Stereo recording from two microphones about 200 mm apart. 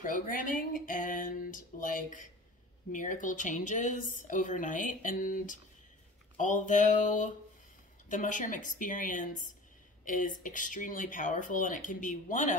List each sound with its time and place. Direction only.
0.0 s a woman's voice: 40° left (ahead or behind)